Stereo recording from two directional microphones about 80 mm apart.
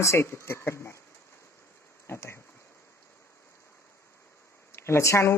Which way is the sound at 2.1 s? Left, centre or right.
Left.